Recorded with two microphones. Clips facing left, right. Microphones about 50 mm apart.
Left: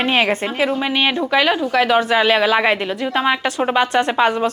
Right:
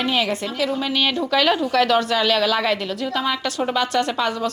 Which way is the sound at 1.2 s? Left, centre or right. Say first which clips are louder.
Left 2 dB; centre.